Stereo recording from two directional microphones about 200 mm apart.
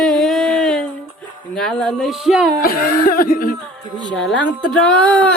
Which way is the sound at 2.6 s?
45° left (ahead or behind).